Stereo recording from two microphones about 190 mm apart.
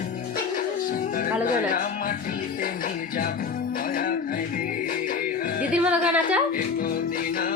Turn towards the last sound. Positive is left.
turn(degrees=50)  # may be behind; listen again after turning